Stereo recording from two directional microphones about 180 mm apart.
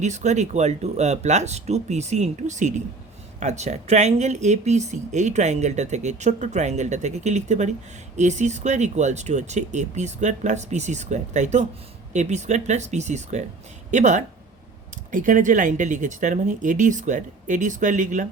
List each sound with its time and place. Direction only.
0.0 s speech: 40° right (ahead or behind)